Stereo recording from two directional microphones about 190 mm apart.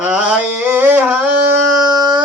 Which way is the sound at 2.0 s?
20° right (ahead or behind).